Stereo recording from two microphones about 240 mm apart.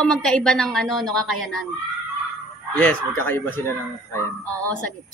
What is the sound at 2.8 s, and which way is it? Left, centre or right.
Speech, centre.